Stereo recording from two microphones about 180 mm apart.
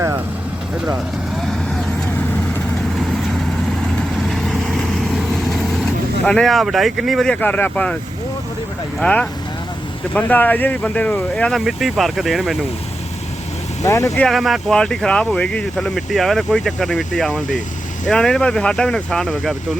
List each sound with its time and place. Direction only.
4.3 s vehicle: centre (ahead or behind)
9.0 s speech: 5° left (ahead or behind)
13.8 s speech: 15° left (ahead or behind)
14.2 s speech: centre (ahead or behind)